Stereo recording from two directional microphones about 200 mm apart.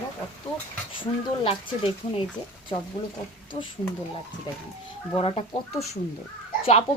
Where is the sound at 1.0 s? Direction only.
25° left (ahead or behind).